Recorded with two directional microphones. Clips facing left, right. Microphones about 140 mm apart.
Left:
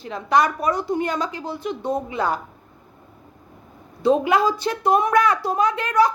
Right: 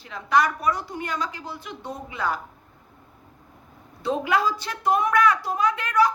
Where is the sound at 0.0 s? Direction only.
25° left (ahead or behind).